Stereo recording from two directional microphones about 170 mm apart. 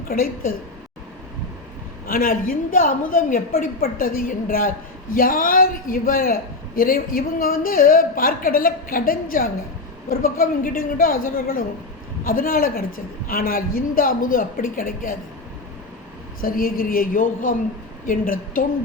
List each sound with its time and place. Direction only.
0.1 s a man's voice: 60° left (ahead or behind)
2.0 s a man's voice: 55° left (ahead or behind)
16.4 s a man's voice: 55° left (ahead or behind)